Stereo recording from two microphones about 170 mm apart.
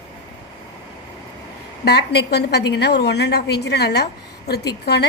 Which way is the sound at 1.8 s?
75° left (ahead or behind).